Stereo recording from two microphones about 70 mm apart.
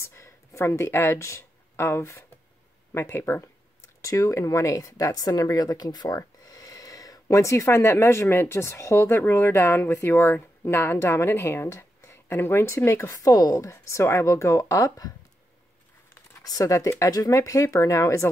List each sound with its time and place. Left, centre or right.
0.0 s speech: left
4.0 s speech: left
16.4 s speech: left